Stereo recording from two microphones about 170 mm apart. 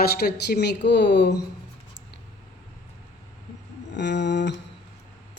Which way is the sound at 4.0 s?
90° left.